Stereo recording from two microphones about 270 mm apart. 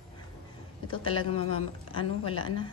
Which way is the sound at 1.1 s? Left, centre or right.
Left.